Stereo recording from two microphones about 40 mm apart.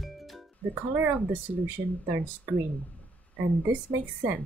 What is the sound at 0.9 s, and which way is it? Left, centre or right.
Speech, right.